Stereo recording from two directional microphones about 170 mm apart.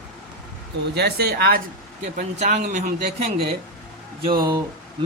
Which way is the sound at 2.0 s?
45° right (ahead or behind).